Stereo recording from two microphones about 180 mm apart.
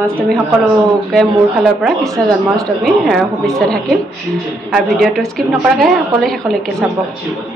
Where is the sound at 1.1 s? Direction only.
Centre (ahead or behind).